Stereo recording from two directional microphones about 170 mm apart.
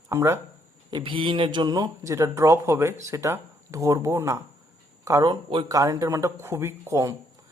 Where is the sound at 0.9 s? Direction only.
30° right (ahead or behind).